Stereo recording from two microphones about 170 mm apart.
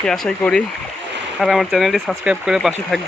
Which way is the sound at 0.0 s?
5° left (ahead or behind).